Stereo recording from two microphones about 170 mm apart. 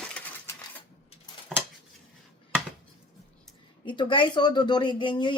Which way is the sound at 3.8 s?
30° left (ahead or behind).